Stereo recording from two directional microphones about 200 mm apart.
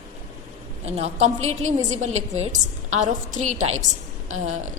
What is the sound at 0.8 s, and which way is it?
A woman's voice, 30° right (ahead or behind).